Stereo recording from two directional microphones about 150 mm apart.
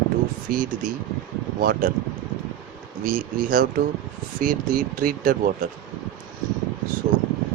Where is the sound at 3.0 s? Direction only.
70° right (ahead or behind).